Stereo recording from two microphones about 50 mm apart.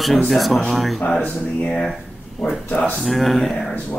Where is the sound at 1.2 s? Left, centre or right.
Left.